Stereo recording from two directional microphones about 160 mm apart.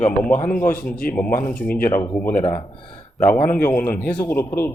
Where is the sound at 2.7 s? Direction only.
30° left (ahead or behind).